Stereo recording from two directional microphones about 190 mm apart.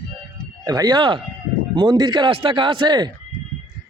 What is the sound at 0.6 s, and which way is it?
Speech, 20° right (ahead or behind).